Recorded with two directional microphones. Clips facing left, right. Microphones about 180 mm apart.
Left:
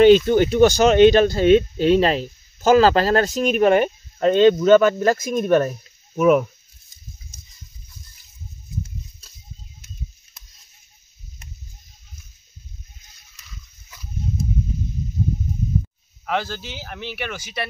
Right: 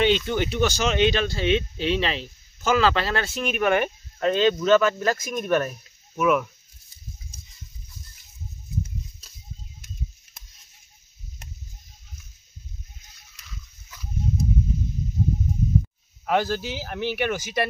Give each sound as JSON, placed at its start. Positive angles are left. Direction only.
{"t": 0.0, "sound": "speech", "side_deg": 45}
{"t": 6.1, "sound": "speech", "side_deg": 40}
{"t": 16.3, "sound": "speech", "side_deg": -10}
{"t": 17.3, "sound": "speech", "side_deg": -45}